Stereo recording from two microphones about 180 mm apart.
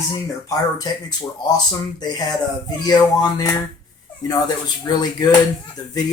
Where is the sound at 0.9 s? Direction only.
25° left (ahead or behind).